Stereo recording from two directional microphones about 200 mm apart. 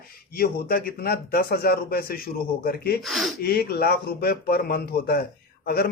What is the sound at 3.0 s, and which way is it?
Speech, centre (ahead or behind).